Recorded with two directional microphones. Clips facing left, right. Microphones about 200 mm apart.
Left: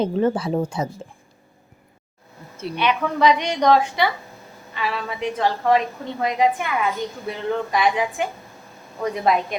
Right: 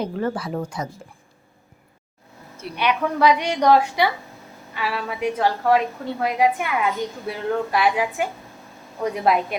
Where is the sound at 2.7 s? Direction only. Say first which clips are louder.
Even; 10° right (ahead or behind).